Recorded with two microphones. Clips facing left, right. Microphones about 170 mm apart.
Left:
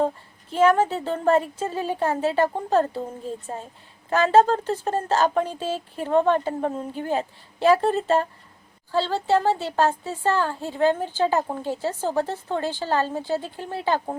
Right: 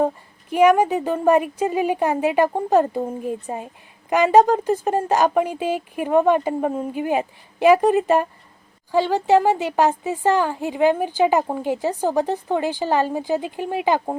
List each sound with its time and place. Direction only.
0.5 s speech: 15° right (ahead or behind)